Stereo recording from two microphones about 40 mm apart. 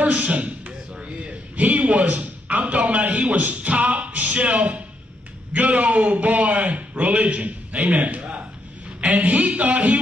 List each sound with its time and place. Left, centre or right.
0.0 s a sound: right
3.3 s a man's voice: right
3.7 s music: right
5.7 s a man's voice: right